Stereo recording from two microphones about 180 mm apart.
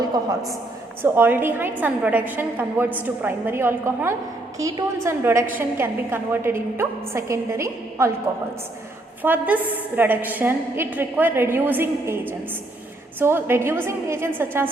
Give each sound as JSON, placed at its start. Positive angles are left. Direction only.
{"t": 1.0, "sound": "a woman's voice", "side_deg": -10}
{"t": 9.2, "sound": "a woman's voice", "side_deg": -10}